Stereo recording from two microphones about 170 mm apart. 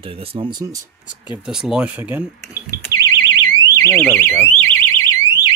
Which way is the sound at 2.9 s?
25° left (ahead or behind).